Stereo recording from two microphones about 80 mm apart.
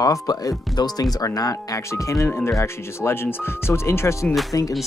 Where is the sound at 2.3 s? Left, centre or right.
Left.